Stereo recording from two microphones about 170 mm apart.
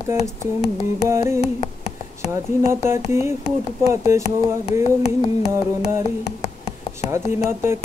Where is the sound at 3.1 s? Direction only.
15° right (ahead or behind).